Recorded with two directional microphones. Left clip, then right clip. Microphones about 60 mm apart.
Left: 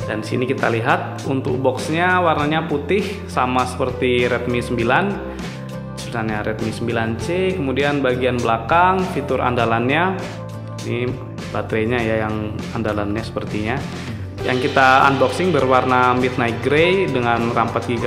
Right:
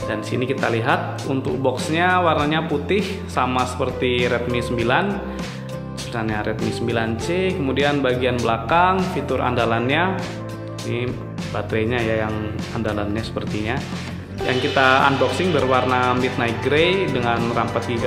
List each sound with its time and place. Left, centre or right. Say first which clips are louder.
0.1 s speech: left 3 dB; left
3.8 s speech: left 2 dB; left
6.3 s speech: even; left
11.5 s a man's voice: left 2 dB; left
14.4 s a man's voice: left 2 dB; left
17.2 s speech: left 3 dB; left